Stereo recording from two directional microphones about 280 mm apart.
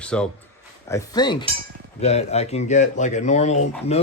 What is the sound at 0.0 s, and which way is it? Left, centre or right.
Speech, centre.